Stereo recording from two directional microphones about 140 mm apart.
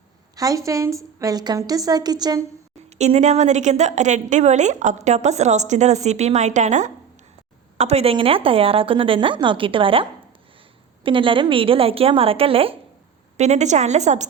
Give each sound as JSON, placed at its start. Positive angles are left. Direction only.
{"t": 0.3, "sound": "a woman's voice", "side_deg": -25}
{"t": 3.0, "sound": "a woman's voice", "side_deg": -55}
{"t": 7.8, "sound": "a woman's voice", "side_deg": -50}
{"t": 13.3, "sound": "a woman's voice", "side_deg": -55}